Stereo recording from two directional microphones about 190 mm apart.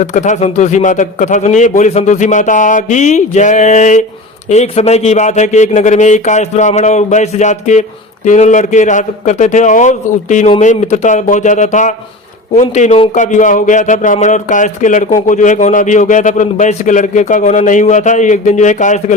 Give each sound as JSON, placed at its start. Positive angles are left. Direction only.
{"t": 0.0, "sound": "a man's voice", "side_deg": 40}